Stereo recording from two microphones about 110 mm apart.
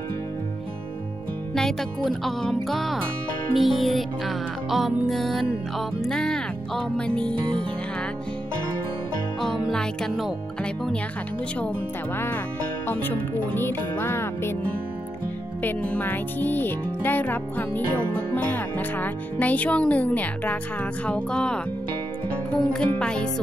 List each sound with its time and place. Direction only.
1.5 s music: 5° left (ahead or behind)
9.4 s speech: 5° left (ahead or behind)
12.8 s music: 15° left (ahead or behind)
15.6 s speech: 15° left (ahead or behind)
22.7 s speech: 10° left (ahead or behind)